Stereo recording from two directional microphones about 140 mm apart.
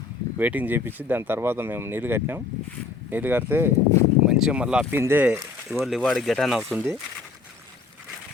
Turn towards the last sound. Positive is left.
turn(degrees=-15)  # may be behind; listen again after turning